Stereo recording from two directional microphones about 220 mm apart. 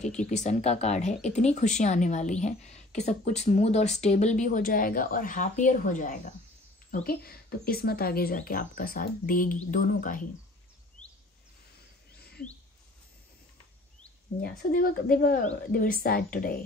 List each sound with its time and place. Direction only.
0.0 s speech: 5° left (ahead or behind)
0.3 s speech: 30° left (ahead or behind)
11.0 s a sound: 5° left (ahead or behind)
14.6 s speech: 40° left (ahead or behind)